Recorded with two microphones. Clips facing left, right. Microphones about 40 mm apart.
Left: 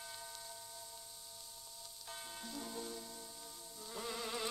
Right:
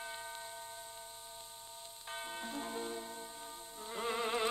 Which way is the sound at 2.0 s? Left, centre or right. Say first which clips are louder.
Right 7 dB; right.